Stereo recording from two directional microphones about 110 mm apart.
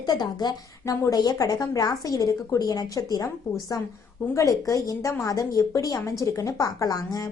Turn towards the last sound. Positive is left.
turn(degrees=35)  # may be behind; listen again after turning